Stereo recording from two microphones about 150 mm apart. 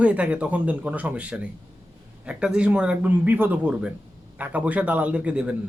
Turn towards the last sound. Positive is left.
turn(degrees=-10)  # may be behind; listen again after turning